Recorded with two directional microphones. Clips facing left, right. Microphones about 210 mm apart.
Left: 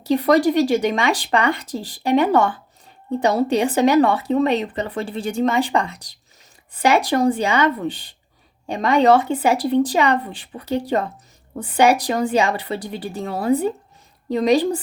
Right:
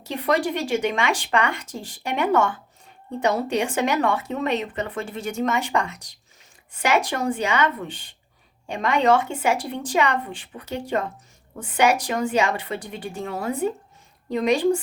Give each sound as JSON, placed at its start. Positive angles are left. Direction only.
{"t": 0.0, "sound": "speech", "side_deg": 35}